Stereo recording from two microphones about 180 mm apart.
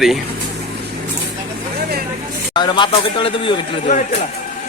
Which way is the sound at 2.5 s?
25° left (ahead or behind).